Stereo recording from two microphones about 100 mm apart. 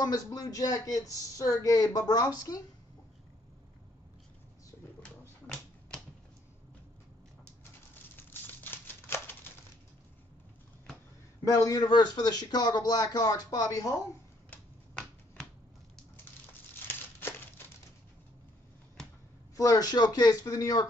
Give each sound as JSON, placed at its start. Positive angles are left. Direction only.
{"t": 0.0, "sound": "speech", "side_deg": 40}
{"t": 8.2, "sound": "a sound", "side_deg": 20}
{"t": 11.4, "sound": "speech", "side_deg": 35}
{"t": 16.8, "sound": "crumpling", "side_deg": 20}
{"t": 19.5, "sound": "speech", "side_deg": 35}